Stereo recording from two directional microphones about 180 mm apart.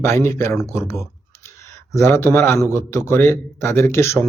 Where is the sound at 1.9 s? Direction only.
15° left (ahead or behind).